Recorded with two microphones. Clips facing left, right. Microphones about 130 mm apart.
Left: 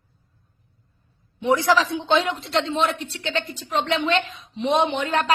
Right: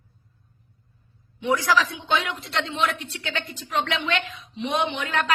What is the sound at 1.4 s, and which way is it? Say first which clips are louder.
A woman's voice: left 3 dB; 25° left (ahead or behind).